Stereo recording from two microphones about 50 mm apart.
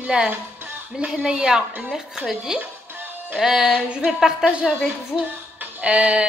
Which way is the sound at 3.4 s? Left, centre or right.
Centre.